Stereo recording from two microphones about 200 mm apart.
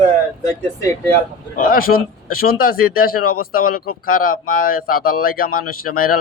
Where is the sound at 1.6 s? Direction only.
45° left (ahead or behind).